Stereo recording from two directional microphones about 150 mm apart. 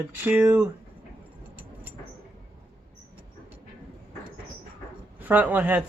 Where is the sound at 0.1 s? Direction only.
10° right (ahead or behind).